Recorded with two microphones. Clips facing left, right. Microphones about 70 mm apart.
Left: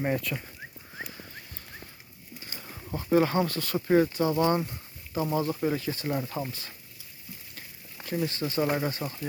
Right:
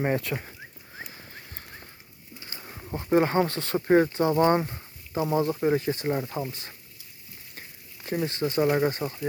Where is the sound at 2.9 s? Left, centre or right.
Right.